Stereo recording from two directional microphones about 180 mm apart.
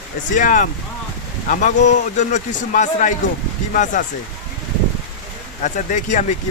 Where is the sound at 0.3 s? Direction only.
45° left (ahead or behind).